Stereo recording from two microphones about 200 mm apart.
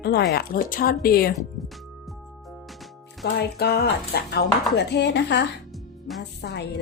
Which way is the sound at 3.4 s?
55° left (ahead or behind).